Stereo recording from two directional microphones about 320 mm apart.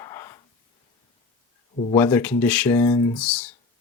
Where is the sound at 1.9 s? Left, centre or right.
Centre.